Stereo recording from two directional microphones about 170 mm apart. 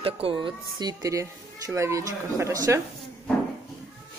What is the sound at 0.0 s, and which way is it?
Speech, 30° right (ahead or behind).